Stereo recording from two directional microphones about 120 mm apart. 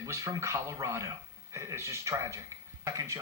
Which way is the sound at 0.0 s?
25° right (ahead or behind).